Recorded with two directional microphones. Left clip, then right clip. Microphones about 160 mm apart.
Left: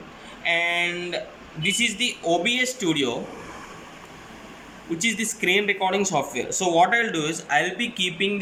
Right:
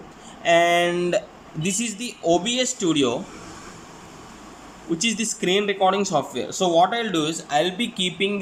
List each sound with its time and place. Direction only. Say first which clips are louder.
0.4 s speech: right 5 dB; 50° right (ahead or behind)
2.0 s a man's voice: right 1 dB; 30° right (ahead or behind)
4.9 s speech: left 1 dB; 15° right (ahead or behind)